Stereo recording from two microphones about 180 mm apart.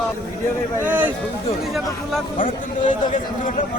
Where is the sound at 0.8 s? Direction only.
10° right (ahead or behind).